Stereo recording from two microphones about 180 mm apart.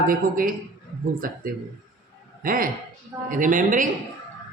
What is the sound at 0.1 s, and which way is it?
A man's voice, 50° right (ahead or behind).